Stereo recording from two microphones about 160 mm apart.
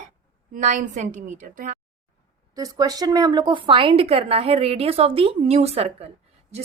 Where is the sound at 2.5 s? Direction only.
25° right (ahead or behind).